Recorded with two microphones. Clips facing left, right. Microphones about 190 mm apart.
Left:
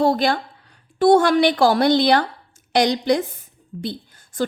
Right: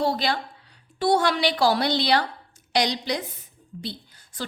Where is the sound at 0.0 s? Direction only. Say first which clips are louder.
Left 6 dB; 50° left (ahead or behind).